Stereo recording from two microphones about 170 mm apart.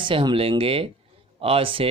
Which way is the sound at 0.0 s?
30° right (ahead or behind).